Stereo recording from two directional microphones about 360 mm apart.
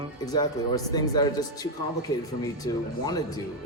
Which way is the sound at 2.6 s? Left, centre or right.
Centre.